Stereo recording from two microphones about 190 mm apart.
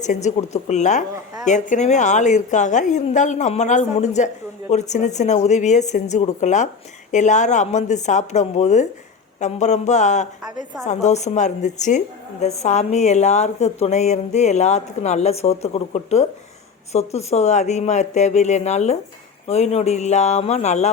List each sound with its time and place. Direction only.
0.0 s a woman's voice: 40° left (ahead or behind)